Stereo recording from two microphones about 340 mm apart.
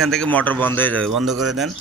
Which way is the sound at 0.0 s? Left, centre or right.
Centre.